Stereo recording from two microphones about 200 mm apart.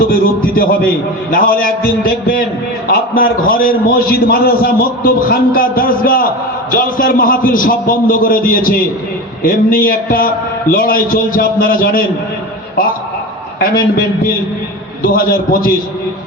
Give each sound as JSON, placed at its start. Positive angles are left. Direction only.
{"t": 0.1, "sound": "a sound", "side_deg": 45}
{"t": 1.3, "sound": "a man's voice", "side_deg": 45}
{"t": 15.0, "sound": "a man's voice", "side_deg": 50}